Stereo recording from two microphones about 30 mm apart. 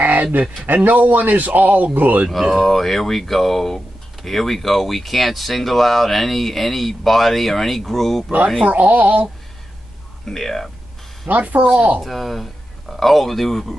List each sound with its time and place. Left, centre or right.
0.0 s a sound: right
0.7 s a man's voice: right
2.5 s speech: centre
8.6 s speech: right
10.2 s speech: centre
11.2 s speech: right
12.0 s speech: centre